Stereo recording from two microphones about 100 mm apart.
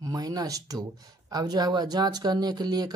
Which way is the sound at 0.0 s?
40° right (ahead or behind).